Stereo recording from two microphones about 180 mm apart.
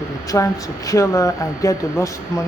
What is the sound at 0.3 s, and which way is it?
Speech, 15° left (ahead or behind).